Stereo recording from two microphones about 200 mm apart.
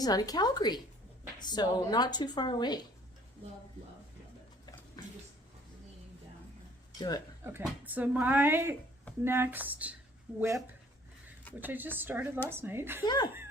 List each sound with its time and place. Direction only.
0.0 s speech: 20° left (ahead or behind)
7.4 s speech: 10° right (ahead or behind)
11.6 s speech: 10° right (ahead or behind)
13.1 s speech: 20° left (ahead or behind)